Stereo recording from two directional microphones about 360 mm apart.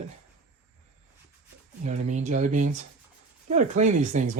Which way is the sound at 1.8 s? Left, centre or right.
Centre.